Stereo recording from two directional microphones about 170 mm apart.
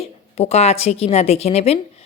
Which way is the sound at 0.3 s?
40° left (ahead or behind).